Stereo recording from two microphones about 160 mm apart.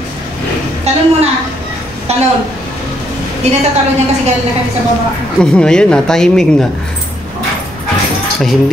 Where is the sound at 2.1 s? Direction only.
40° right (ahead or behind).